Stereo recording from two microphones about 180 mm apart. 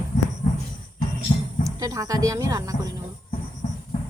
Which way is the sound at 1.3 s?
40° left (ahead or behind).